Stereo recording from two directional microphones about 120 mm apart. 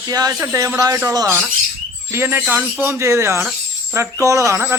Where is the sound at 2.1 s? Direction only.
20° right (ahead or behind).